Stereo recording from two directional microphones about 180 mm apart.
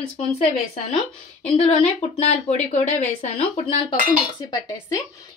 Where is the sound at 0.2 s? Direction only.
35° left (ahead or behind).